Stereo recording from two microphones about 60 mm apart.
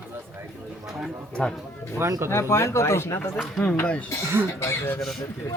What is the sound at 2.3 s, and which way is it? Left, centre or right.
Speech, left.